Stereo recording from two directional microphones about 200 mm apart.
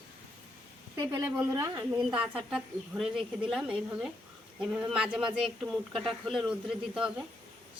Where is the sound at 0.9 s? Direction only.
15° right (ahead or behind).